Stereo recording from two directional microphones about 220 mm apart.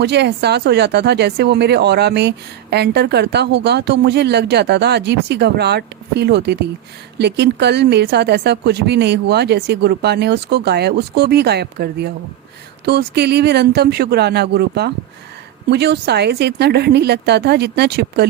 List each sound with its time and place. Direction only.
0.0 s speech: 50° right (ahead or behind)